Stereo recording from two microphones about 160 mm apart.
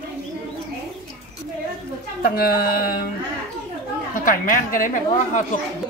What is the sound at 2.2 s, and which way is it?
Speech, 70° left (ahead or behind).